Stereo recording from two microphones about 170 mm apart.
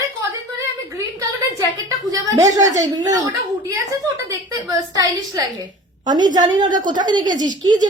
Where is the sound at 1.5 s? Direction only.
20° right (ahead or behind).